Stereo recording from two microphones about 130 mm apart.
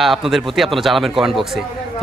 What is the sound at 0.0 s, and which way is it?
A man's voice, centre (ahead or behind).